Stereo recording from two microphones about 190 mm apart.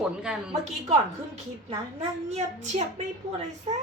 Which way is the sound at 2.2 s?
35° right (ahead or behind).